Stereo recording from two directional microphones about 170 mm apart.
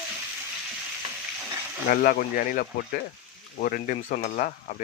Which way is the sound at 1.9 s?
60° left (ahead or behind).